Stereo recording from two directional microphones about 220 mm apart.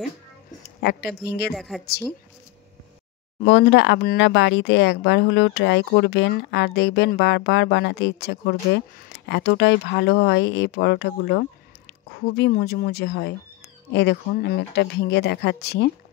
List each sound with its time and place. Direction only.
0.7 s speech: 50° left (ahead or behind)
1.5 s speech: centre (ahead or behind)
1.9 s speech: 45° left (ahead or behind)
3.4 s speech: 50° left (ahead or behind)